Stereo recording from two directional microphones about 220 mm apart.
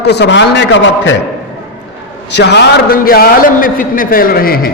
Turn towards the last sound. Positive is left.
turn(degrees=40)  # may be behind; listen again after turning